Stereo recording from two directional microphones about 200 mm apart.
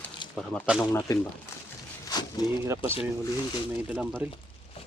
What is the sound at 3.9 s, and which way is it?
Speech, 5° right (ahead or behind).